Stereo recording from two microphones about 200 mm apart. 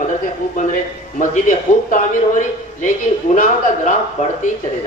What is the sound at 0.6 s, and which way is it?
A man's voice, 40° left (ahead or behind).